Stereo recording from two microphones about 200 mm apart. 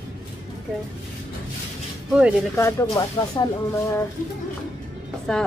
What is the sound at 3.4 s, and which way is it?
Speech, 20° left (ahead or behind).